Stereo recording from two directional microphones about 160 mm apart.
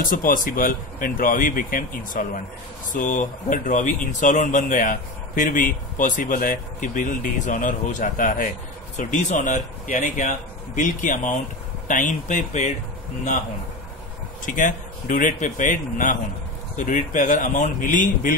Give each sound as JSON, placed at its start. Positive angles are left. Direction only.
{"t": 0.0, "sound": "speech", "side_deg": 60}
{"t": 14.4, "sound": "speech", "side_deg": 55}